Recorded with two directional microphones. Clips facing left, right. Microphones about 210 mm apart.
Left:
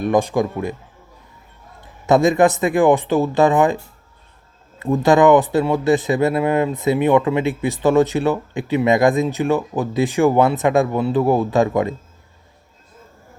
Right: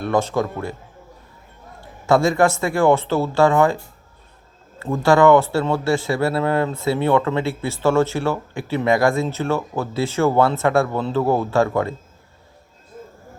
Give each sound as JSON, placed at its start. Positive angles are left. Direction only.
{"t": 0.0, "sound": "speech", "side_deg": 15}
{"t": 1.8, "sound": "speech", "side_deg": 20}
{"t": 4.8, "sound": "speech", "side_deg": 20}